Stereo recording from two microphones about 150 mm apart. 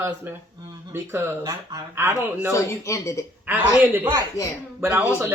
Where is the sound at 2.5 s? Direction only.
20° left (ahead or behind).